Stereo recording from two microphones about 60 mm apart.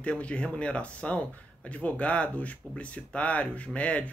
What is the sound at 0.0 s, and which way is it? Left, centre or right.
Speech, centre.